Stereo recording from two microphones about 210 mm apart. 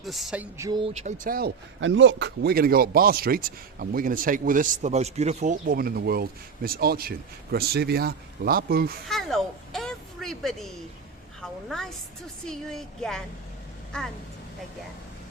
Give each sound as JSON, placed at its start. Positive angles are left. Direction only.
{"t": 0.0, "sound": "speech", "side_deg": 0}
{"t": 0.6, "sound": "speech", "side_deg": -20}
{"t": 9.0, "sound": "a sound", "side_deg": 0}
{"t": 11.4, "sound": "speech", "side_deg": 0}